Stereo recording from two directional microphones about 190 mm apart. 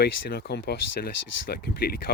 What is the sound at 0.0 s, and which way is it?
Speech, 55° left (ahead or behind).